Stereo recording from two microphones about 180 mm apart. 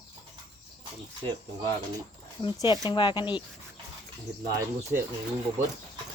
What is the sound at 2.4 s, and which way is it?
Speech, 20° left (ahead or behind).